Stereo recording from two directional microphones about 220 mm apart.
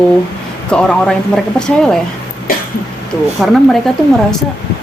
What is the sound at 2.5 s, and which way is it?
Speech, 40° left (ahead or behind).